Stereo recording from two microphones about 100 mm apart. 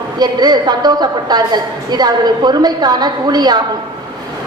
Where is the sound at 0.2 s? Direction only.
45° right (ahead or behind).